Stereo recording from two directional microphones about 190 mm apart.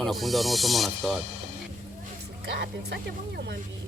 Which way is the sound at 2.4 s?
60° right (ahead or behind).